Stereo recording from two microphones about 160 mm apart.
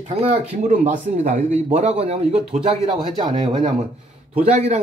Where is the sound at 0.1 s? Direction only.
40° right (ahead or behind).